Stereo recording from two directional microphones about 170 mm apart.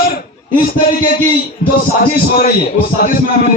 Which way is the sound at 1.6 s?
55° left (ahead or behind).